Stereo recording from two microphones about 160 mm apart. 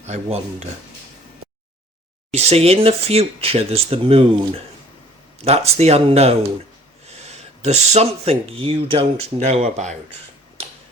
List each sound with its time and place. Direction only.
0.0 s speech: 45° right (ahead or behind)
2.3 s speech: 40° right (ahead or behind)
10.6 s a sound: 40° right (ahead or behind)